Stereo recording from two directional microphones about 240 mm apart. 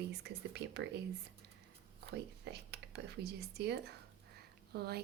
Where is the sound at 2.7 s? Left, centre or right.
Right.